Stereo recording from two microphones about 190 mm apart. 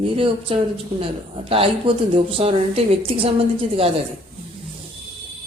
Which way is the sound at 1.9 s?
30° right (ahead or behind).